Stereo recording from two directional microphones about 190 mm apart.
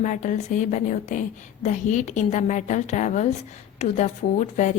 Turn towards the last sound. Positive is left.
turn(degrees=40)  # may be behind; listen again after turning